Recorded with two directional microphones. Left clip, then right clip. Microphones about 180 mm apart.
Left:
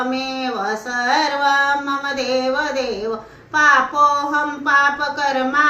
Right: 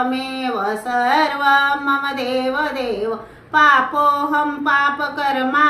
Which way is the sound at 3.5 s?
20° right (ahead or behind).